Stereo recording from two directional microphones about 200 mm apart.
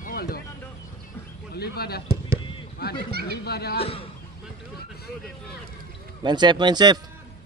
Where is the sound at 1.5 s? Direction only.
50° left (ahead or behind).